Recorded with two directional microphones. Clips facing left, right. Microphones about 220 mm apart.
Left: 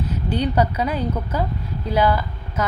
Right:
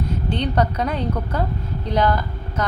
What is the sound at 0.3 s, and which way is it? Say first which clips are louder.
A woman's voice: left 2 dB; 10° left (ahead or behind).